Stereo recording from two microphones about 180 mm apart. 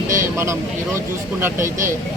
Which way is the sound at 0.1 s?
15° right (ahead or behind).